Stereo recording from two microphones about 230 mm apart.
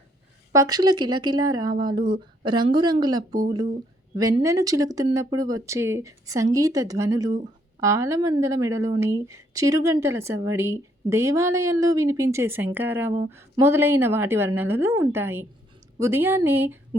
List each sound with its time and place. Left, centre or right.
0.5 s speech: centre